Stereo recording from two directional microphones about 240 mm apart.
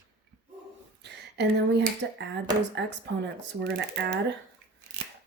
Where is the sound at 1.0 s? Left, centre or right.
Right.